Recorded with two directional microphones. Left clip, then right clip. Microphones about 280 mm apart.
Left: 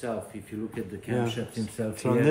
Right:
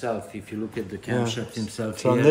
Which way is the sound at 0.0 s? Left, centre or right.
Right.